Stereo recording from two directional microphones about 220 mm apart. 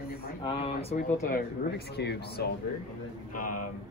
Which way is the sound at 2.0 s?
50° left (ahead or behind).